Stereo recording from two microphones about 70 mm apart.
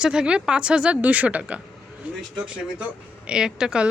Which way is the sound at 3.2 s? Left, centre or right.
Centre.